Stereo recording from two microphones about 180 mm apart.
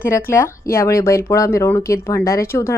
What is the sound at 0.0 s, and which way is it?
A woman's voice, 15° left (ahead or behind).